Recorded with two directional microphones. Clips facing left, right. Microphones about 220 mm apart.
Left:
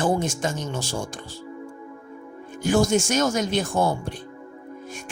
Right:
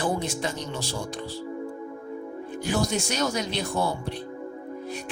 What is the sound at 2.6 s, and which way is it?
Speech, 45° left (ahead or behind).